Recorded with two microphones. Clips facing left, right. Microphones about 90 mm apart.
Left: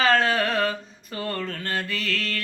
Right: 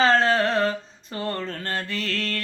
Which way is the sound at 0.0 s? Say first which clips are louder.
Right 2 dB; 30° right (ahead or behind).